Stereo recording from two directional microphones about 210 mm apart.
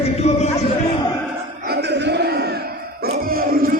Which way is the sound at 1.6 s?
50° right (ahead or behind).